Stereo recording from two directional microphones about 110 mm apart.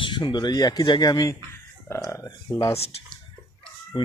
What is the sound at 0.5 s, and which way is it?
Speech, 35° left (ahead or behind).